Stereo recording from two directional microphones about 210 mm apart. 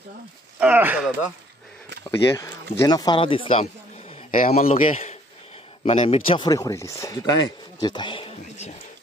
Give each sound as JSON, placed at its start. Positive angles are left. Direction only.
{"t": 0.6, "sound": "speech", "side_deg": -5}
{"t": 2.0, "sound": "speech", "side_deg": 15}
{"t": 4.3, "sound": "speech", "side_deg": 35}